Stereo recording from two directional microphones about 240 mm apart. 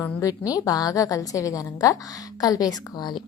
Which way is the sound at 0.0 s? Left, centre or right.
Centre.